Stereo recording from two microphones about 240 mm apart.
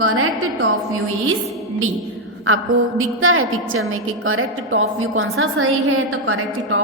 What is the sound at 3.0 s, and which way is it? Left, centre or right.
A woman's voice, right.